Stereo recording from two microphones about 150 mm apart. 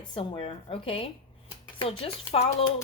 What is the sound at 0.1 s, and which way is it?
Speech, 40° left (ahead or behind).